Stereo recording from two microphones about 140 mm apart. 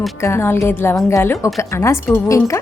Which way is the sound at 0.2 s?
20° left (ahead or behind).